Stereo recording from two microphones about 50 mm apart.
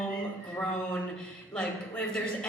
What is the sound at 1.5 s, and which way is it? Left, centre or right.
Speech, left.